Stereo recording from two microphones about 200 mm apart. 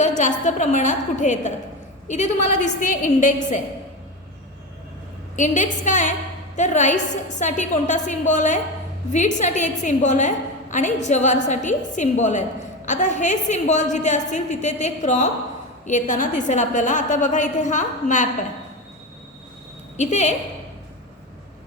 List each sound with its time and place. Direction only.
0.2 s a woman's voice: 40° left (ahead or behind)
5.4 s a woman's voice: 40° left (ahead or behind)
20.0 s a woman's voice: 35° left (ahead or behind)